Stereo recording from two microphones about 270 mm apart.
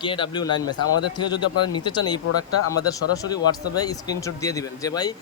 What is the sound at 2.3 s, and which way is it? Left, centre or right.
Speech, left.